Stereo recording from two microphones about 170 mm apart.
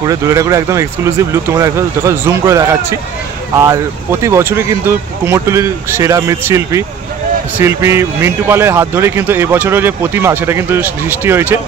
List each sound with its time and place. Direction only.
0.0 s a man's voice: 20° right (ahead or behind)